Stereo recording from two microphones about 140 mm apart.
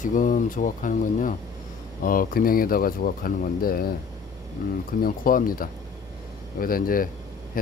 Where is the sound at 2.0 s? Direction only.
90° left.